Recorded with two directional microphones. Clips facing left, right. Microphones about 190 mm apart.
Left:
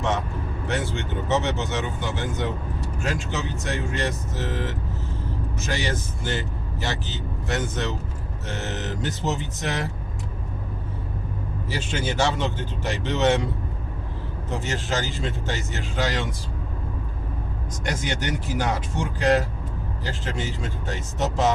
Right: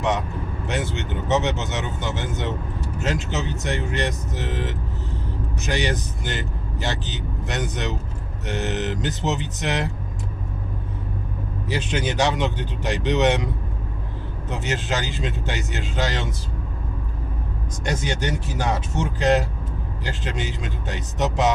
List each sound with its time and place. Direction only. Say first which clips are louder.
0.7 s speech: right 1 dB; 20° right (ahead or behind)
11.7 s speech: right 3 dB; 20° right (ahead or behind)
14.5 s speech: right 1 dB; 20° right (ahead or behind)
17.8 s speech: right 2 dB; 25° right (ahead or behind)